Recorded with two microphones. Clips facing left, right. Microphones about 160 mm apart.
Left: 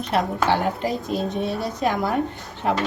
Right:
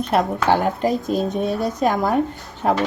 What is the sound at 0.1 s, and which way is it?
A woman's voice, 45° right (ahead or behind).